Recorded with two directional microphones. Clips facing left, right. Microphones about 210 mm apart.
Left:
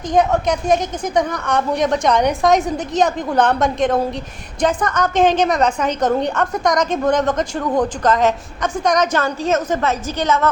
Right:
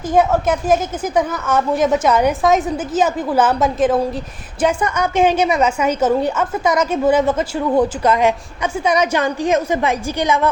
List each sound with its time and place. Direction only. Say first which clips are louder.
0.1 s a woman's voice: right 1 dB; 5° right (ahead or behind)